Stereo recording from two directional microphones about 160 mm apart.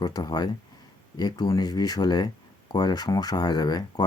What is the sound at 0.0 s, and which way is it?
Speech, 25° left (ahead or behind).